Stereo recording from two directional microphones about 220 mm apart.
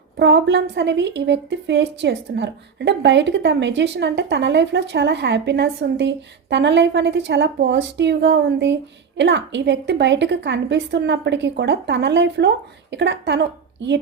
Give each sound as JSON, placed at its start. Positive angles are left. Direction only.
{"t": 0.2, "sound": "speech", "side_deg": -50}